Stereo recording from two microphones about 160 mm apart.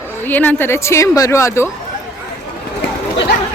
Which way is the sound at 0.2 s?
10° left (ahead or behind).